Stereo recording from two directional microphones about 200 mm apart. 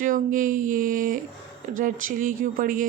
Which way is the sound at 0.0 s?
40° right (ahead or behind).